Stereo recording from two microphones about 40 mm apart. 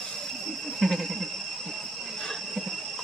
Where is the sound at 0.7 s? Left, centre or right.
Centre.